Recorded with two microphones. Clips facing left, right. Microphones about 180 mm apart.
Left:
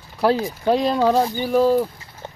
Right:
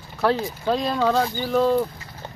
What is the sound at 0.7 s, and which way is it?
Speech, 15° left (ahead or behind).